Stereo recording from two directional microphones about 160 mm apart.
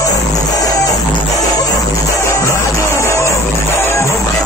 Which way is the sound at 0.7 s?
20° left (ahead or behind).